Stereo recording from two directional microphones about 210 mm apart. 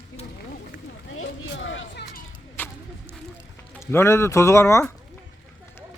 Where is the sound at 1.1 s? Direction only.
70° left (ahead or behind).